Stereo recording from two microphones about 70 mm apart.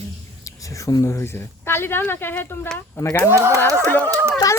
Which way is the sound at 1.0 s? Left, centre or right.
Left.